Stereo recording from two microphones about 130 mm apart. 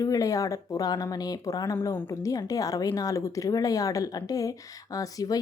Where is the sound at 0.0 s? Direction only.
25° left (ahead or behind).